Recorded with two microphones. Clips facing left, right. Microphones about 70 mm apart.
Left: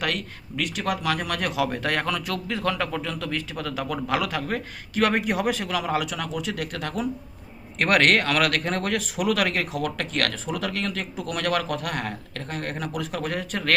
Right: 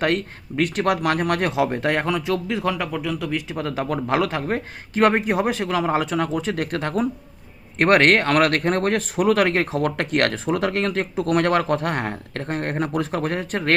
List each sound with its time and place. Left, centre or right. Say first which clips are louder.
0.0 s speech: right 7 dB; right
1.5 s a man's voice: right 4 dB; right
3.6 s speech: right 5 dB; right